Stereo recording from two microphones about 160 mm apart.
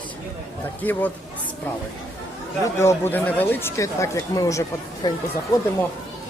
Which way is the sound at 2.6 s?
15° left (ahead or behind).